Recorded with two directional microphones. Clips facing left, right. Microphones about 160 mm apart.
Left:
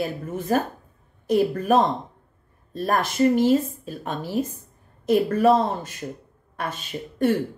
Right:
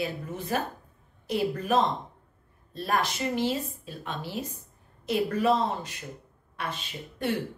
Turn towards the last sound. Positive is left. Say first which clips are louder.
# left 9 dB
turn(degrees=45)  # may be behind; listen again after turning